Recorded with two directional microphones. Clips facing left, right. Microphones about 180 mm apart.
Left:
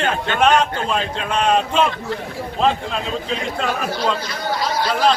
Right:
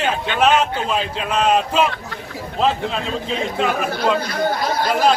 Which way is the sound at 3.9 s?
55° right (ahead or behind).